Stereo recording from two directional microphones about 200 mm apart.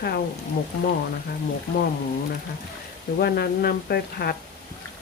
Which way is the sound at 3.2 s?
55° left (ahead or behind).